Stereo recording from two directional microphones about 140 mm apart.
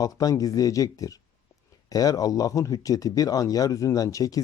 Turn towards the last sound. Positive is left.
turn(degrees=25)  # may be behind; listen again after turning